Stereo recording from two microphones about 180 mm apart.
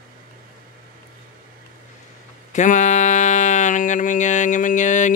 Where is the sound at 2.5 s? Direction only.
40° left (ahead or behind).